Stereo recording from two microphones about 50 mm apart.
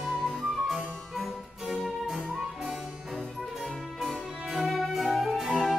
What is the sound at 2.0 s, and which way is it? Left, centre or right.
Music, centre.